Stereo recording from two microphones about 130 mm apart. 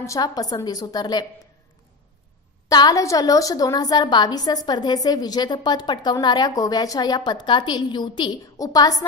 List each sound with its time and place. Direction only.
0.0 s a woman's voice: 25° left (ahead or behind)
2.7 s a woman's voice: 30° left (ahead or behind)